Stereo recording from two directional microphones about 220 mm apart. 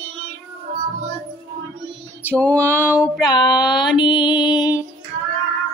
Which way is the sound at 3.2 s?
20° left (ahead or behind).